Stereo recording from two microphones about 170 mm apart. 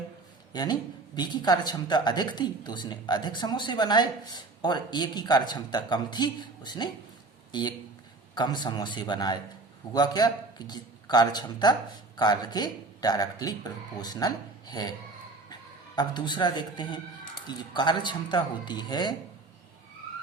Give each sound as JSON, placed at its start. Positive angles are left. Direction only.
{"t": 0.5, "sound": "speech", "side_deg": 25}
{"t": 8.4, "sound": "speech", "side_deg": 25}
{"t": 16.0, "sound": "speech", "side_deg": 25}